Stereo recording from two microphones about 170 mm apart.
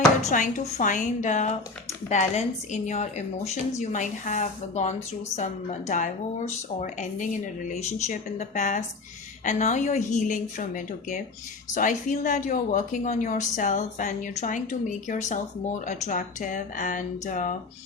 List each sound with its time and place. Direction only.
0.3 s a woman's voice: 50° left (ahead or behind)